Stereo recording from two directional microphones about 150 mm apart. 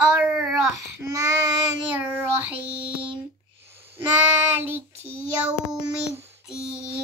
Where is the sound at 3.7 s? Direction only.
15° right (ahead or behind).